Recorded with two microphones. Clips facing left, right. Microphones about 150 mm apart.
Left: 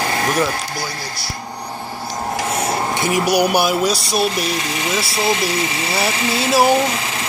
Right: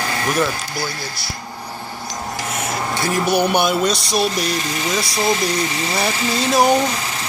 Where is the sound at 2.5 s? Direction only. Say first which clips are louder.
Left 4 dB; 30° left (ahead or behind).